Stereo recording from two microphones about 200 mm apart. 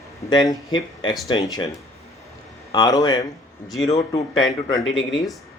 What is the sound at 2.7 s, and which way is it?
Speech, 20° left (ahead or behind).